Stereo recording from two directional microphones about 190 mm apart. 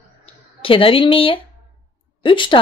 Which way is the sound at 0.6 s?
30° left (ahead or behind).